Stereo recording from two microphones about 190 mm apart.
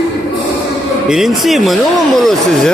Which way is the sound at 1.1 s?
Centre (ahead or behind).